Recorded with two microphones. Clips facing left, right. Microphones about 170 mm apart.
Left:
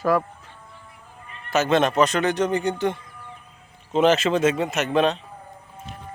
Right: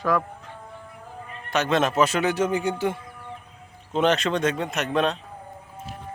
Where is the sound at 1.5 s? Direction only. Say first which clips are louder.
Left 3 dB; centre (ahead or behind).